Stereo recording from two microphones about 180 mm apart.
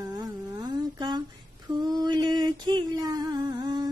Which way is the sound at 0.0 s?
20° right (ahead or behind).